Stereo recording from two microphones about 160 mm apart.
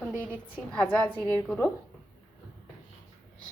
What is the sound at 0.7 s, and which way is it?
Speech, 10° left (ahead or behind).